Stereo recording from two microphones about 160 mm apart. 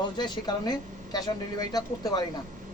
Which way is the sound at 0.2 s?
25° left (ahead or behind).